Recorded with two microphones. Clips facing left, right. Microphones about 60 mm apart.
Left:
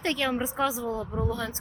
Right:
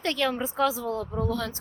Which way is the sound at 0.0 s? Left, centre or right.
Centre.